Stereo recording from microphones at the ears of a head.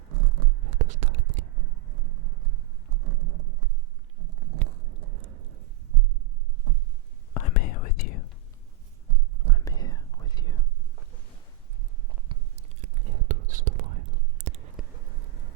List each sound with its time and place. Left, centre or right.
0.1 s a sound: right
7.3 s whispering: left
9.6 s whispering: left
12.3 s whispering: right